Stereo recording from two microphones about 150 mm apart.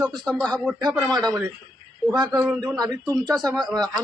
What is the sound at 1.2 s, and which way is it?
Speech, 20° right (ahead or behind).